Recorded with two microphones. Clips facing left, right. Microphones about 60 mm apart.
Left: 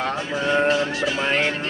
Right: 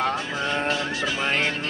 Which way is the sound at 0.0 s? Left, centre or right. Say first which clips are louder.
Left 1 dB; left.